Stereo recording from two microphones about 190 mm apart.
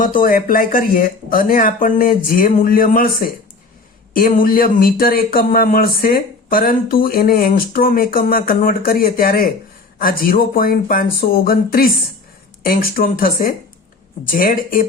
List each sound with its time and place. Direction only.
0.0 s speech: 45° left (ahead or behind)